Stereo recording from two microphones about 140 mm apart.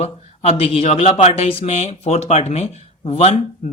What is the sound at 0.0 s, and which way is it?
A man's voice, 45° left (ahead or behind).